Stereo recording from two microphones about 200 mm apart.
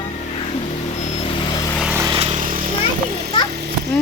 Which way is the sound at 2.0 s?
20° right (ahead or behind).